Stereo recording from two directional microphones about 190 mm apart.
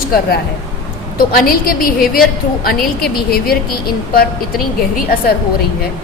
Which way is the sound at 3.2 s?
55° left (ahead or behind).